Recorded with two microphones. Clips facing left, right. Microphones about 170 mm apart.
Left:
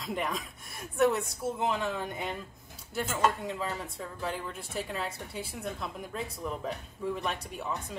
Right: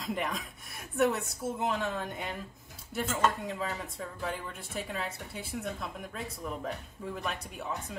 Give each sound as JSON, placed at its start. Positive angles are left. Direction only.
{"t": 0.1, "sound": "speech", "side_deg": 0}